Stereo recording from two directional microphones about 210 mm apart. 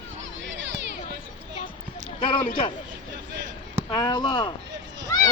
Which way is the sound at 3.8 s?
20° left (ahead or behind).